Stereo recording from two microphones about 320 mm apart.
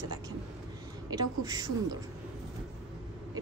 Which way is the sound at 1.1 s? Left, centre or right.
Centre.